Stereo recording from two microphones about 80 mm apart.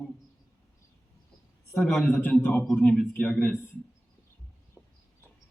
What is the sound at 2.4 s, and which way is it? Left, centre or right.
Speech, left.